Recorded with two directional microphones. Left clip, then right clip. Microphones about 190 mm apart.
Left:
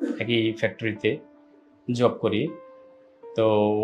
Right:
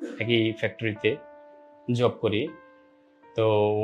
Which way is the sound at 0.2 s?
35° right (ahead or behind).